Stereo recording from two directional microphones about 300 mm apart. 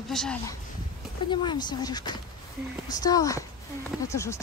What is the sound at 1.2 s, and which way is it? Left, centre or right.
Speech, centre.